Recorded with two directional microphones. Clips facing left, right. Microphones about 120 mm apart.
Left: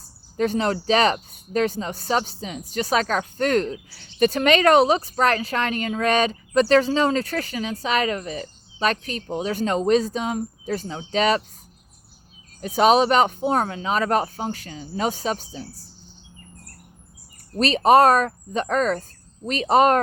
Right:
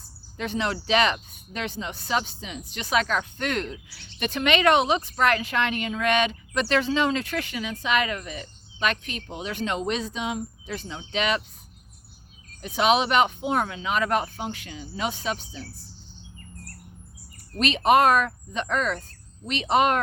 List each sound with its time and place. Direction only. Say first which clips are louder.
0.3 s speech: left 6 dB; 40° left (ahead or behind)
12.6 s speech: left 5 dB; 40° left (ahead or behind)
17.6 s speech: left 4 dB; 35° left (ahead or behind)